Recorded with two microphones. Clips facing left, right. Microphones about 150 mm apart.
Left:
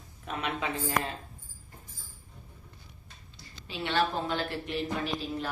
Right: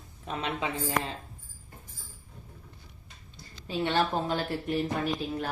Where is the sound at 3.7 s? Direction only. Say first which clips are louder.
Right 2 dB; 40° right (ahead or behind).